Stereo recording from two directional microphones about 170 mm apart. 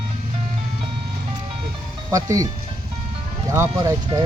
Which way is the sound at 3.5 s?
15° right (ahead or behind).